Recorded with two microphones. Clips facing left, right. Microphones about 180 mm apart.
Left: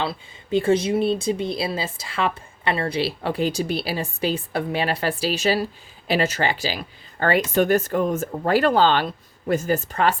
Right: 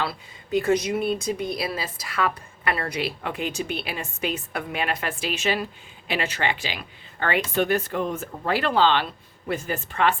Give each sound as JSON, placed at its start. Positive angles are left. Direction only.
{"t": 0.0, "sound": "speech", "side_deg": 25}